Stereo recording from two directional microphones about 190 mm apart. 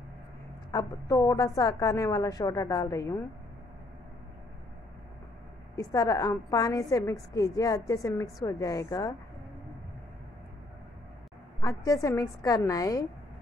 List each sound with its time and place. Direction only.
0.7 s a woman's voice: 20° left (ahead or behind)
5.8 s a woman's voice: 20° left (ahead or behind)
11.6 s a woman's voice: 15° left (ahead or behind)